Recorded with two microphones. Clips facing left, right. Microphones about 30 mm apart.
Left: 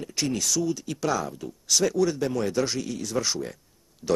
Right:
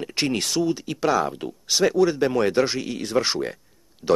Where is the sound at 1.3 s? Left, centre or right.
Right.